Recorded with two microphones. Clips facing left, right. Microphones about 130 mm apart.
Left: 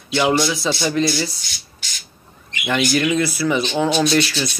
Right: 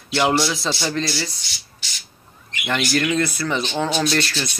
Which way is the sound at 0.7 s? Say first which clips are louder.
Left 5 dB; 15° left (ahead or behind).